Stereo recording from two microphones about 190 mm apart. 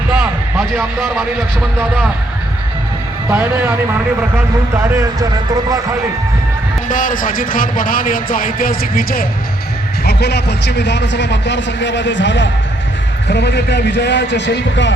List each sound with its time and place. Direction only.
0.1 s a sound: 5° right (ahead or behind)
3.2 s a man's voice: 5° right (ahead or behind)
6.8 s a man's voice: 45° left (ahead or behind)
10.0 s a man's voice: 60° left (ahead or behind)